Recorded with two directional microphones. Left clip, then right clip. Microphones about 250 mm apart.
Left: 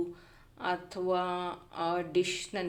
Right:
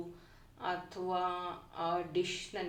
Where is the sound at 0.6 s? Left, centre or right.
Left.